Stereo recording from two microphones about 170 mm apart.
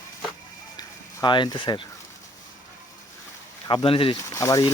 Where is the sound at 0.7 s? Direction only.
25° left (ahead or behind).